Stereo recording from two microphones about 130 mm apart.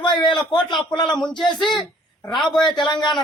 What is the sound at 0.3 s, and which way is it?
A man's voice, 35° left (ahead or behind).